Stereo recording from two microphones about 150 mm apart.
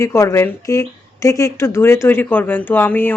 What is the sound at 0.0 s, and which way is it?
A woman's voice, 20° left (ahead or behind).